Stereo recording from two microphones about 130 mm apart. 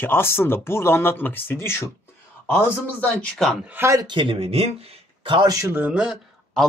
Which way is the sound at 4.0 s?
40° right (ahead or behind).